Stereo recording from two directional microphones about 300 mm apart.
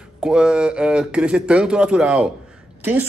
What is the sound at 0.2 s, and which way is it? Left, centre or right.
Speech, centre.